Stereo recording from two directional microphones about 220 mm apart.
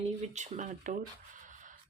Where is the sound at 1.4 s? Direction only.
35° right (ahead or behind).